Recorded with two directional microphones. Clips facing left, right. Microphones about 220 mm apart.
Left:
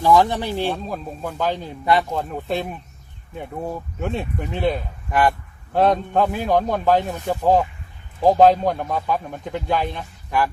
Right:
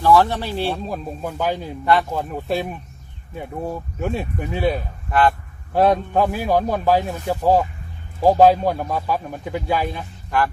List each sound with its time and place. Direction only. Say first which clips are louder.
0.0 s speech: even; 15° left (ahead or behind)
0.7 s a man's voice: right 1 dB; 10° right (ahead or behind)
1.8 s speech: right 1 dB; 15° left (ahead or behind)
2.1 s a man's voice: right 1 dB; 5° right (ahead or behind)
4.0 s a man's voice: right 1 dB; 5° right (ahead or behind)